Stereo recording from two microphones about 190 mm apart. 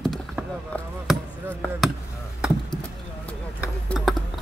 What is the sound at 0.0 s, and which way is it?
Chop, centre (ahead or behind).